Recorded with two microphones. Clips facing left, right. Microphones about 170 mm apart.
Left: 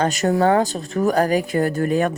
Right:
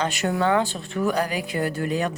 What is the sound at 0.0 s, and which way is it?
Speech, 40° left (ahead or behind).